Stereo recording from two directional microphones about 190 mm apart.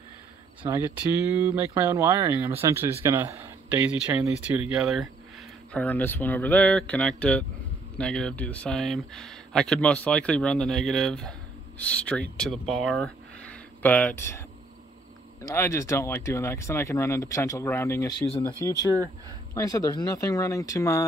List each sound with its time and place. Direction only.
0.6 s speech: 10° right (ahead or behind)
5.7 s speech: 10° left (ahead or behind)
15.4 s speech: 15° left (ahead or behind)